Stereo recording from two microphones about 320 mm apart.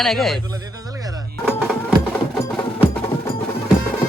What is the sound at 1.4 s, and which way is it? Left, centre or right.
Music, centre.